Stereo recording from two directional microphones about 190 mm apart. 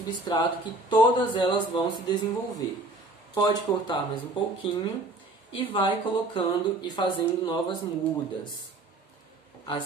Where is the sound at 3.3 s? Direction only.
20° left (ahead or behind).